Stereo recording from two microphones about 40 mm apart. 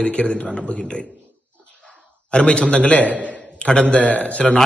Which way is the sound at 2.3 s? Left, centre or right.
Left.